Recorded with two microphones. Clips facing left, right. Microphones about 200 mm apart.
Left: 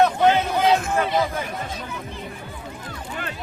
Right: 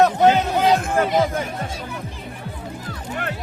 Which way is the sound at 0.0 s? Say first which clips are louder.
Right 2 dB; 40° right (ahead or behind).